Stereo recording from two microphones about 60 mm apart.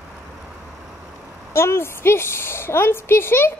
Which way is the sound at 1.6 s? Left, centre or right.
Left.